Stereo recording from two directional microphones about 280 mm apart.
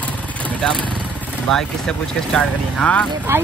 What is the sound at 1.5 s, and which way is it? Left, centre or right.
Speech, centre.